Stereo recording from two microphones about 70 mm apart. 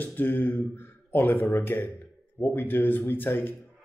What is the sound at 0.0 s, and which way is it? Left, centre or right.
Speech, left.